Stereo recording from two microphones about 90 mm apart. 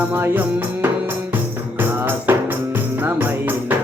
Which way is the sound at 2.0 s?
25° right (ahead or behind).